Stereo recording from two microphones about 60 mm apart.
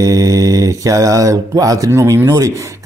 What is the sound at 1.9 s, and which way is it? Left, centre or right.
Speech, right.